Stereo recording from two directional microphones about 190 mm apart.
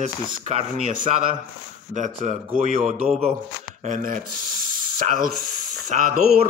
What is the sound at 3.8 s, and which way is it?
Speech, 45° right (ahead or behind).